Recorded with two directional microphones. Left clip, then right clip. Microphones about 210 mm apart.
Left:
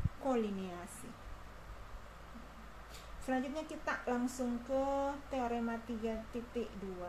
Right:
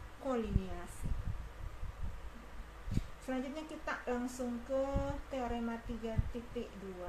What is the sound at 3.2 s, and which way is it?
Speech, 25° left (ahead or behind).